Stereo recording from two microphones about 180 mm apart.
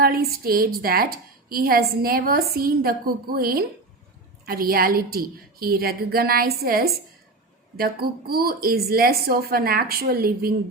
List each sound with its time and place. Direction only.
0.0 s a woman's voice: 55° right (ahead or behind)